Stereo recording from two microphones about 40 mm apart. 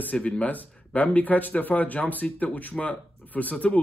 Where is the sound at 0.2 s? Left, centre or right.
Left.